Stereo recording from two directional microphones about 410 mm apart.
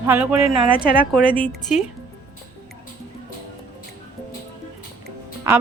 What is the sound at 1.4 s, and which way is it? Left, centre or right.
Speech, centre.